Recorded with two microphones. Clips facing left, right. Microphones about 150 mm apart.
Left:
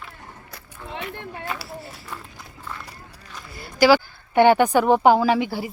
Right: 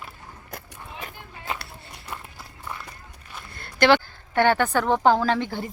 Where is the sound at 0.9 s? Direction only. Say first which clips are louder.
Left 8 dB; 65° left (ahead or behind).